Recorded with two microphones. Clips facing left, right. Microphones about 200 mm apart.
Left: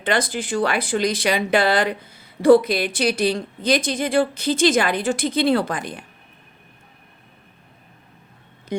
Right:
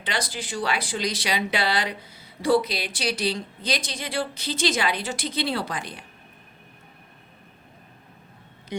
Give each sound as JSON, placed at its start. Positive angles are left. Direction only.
{"t": 0.0, "sound": "speech", "side_deg": 55}
{"t": 8.7, "sound": "speech", "side_deg": 45}